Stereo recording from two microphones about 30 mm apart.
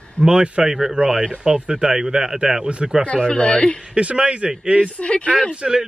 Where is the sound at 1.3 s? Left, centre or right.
Right.